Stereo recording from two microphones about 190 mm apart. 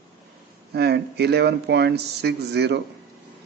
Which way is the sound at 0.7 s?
60° right (ahead or behind).